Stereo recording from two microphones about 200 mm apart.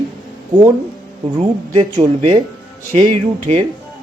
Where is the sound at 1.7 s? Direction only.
30° right (ahead or behind).